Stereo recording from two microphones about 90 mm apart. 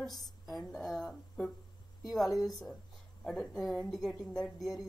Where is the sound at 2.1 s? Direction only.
Centre (ahead or behind).